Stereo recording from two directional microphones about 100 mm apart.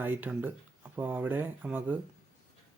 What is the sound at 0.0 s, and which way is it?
Speech, 20° right (ahead or behind).